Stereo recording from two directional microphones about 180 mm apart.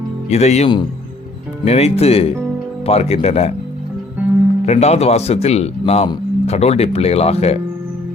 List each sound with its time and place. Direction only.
0.3 s speech: 35° left (ahead or behind)
4.6 s speech: 35° left (ahead or behind)